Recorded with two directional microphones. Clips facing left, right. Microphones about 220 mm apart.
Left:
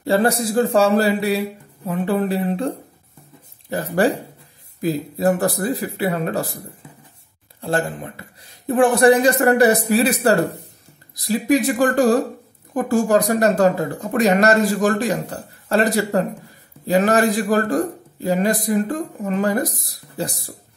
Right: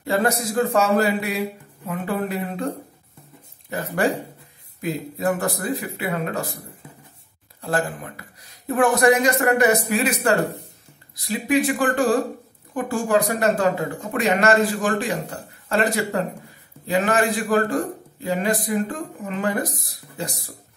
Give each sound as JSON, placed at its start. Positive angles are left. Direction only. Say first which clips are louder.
{"t": 0.0, "sound": "speech", "louder": "left 4 dB", "side_deg": 30}
{"t": 3.7, "sound": "speech", "louder": "left 4 dB", "side_deg": 35}
{"t": 7.6, "sound": "speech", "louder": "left 2 dB", "side_deg": 25}
{"t": 11.2, "sound": "speech", "louder": "left 3 dB", "side_deg": 40}